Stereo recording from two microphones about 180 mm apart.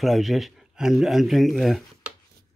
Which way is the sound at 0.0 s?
Centre (ahead or behind).